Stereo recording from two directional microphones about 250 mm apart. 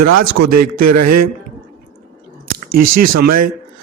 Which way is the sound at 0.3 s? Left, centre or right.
Right.